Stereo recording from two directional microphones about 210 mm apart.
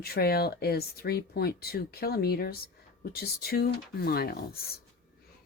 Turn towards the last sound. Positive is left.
turn(degrees=45)  # may be behind; listen again after turning